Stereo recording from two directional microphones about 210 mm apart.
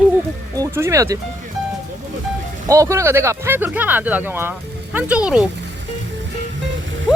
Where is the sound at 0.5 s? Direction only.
15° right (ahead or behind).